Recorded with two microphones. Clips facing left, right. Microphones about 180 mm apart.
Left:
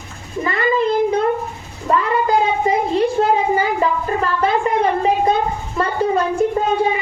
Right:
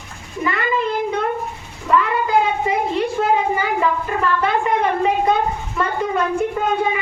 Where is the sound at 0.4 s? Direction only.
35° left (ahead or behind).